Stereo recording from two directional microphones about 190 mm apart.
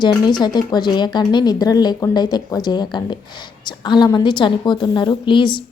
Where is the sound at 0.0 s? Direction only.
25° left (ahead or behind).